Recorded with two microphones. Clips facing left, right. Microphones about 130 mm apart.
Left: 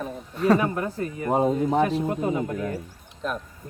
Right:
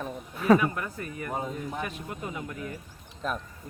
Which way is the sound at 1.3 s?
90° left.